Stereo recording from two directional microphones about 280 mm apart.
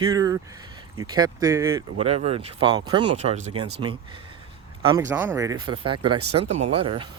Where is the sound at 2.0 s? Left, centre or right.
Right.